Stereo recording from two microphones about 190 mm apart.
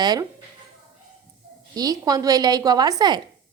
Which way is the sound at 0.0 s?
20° right (ahead or behind).